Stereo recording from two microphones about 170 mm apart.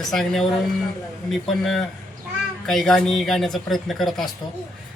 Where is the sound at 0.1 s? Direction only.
Centre (ahead or behind).